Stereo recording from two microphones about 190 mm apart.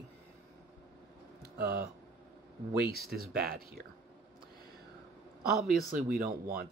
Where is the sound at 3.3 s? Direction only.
50° right (ahead or behind).